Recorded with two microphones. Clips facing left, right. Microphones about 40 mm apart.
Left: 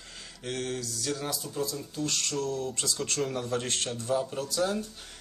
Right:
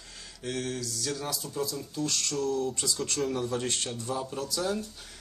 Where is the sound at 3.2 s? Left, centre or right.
Centre.